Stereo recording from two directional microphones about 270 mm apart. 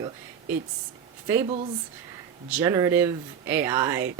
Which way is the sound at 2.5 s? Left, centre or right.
Centre.